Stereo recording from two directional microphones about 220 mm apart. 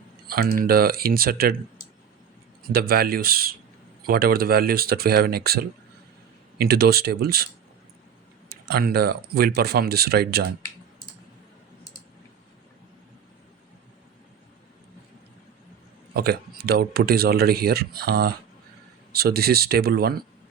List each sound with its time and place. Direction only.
0.3 s speech: 45° right (ahead or behind)
2.6 s speech: 45° right (ahead or behind)
8.4 s speech: 45° right (ahead or behind)
16.1 s speech: 45° right (ahead or behind)